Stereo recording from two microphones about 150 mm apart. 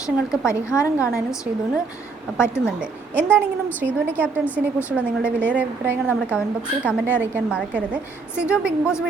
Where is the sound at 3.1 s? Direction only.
10° left (ahead or behind).